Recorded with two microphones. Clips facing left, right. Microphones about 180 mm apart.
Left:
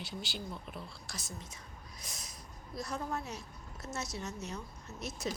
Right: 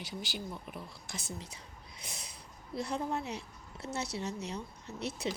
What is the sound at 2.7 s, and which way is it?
A woman's voice, 30° right (ahead or behind).